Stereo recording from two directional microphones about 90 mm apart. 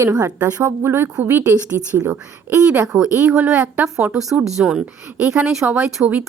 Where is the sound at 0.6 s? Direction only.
30° right (ahead or behind).